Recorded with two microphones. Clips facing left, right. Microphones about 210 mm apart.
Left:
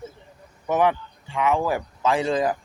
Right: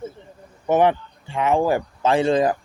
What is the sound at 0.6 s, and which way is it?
Speech, 30° right (ahead or behind).